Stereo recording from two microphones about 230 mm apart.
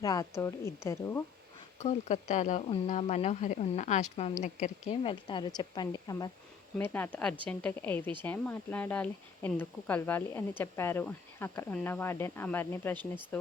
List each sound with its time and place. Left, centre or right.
0.0 s speech: centre
1.8 s speech: left; by 13.5 s centre